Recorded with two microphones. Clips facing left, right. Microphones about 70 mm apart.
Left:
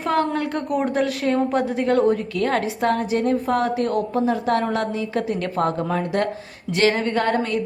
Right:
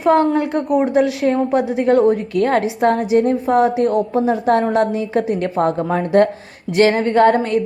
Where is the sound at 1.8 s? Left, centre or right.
Right.